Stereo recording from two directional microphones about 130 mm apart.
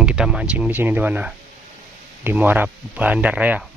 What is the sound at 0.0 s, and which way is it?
Speech, 5° right (ahead or behind).